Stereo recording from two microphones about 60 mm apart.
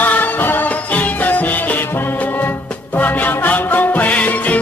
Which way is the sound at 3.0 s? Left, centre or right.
Left.